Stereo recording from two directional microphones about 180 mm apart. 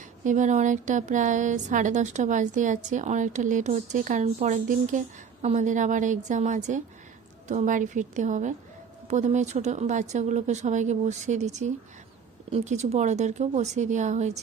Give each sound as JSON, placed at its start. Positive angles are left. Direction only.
{"t": 0.3, "sound": "speech", "side_deg": -45}